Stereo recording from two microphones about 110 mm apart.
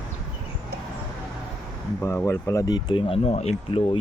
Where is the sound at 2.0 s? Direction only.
20° left (ahead or behind).